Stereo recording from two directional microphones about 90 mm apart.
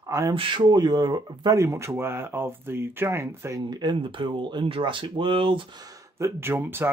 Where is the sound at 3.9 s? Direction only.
65° right (ahead or behind).